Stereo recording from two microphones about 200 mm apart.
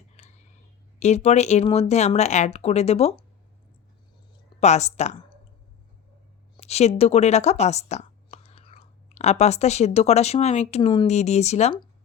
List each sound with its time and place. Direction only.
0.2 s clicking: 35° left (ahead or behind)
0.9 s speech: 35° left (ahead or behind)
4.6 s speech: 35° left (ahead or behind)
6.6 s speech: 30° left (ahead or behind)